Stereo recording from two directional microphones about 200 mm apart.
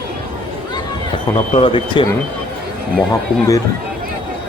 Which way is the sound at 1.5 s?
25° left (ahead or behind).